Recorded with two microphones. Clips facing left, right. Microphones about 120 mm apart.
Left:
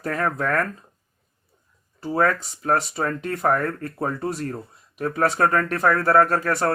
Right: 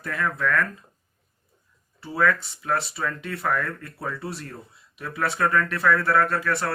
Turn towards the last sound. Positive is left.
turn(degrees=40)  # may be behind; listen again after turning